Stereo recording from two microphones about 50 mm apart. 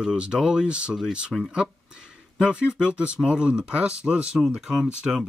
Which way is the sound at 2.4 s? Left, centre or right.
Centre.